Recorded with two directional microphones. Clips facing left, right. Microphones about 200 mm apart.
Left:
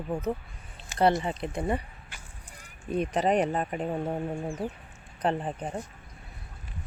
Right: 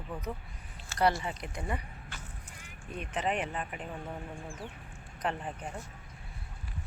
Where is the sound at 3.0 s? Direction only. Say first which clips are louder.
Left 8 dB; 40° left (ahead or behind).